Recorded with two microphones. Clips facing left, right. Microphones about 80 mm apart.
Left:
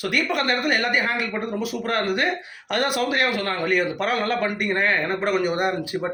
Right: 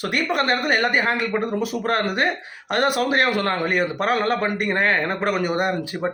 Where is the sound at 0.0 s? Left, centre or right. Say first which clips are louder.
Right 1 dB; right.